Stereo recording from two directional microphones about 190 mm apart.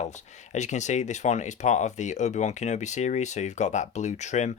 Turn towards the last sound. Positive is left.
turn(degrees=35)  # may be behind; listen again after turning